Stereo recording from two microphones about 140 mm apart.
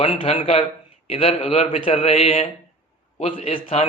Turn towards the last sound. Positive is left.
turn(degrees=40)  # may be behind; listen again after turning